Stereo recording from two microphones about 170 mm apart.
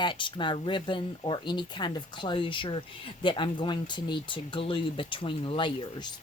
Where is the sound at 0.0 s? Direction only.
30° left (ahead or behind).